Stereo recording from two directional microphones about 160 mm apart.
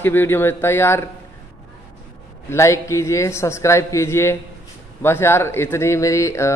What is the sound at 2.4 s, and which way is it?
Speech, 20° left (ahead or behind).